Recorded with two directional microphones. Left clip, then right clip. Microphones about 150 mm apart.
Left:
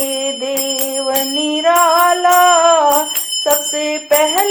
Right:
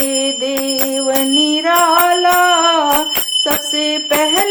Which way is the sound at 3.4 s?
25° right (ahead or behind).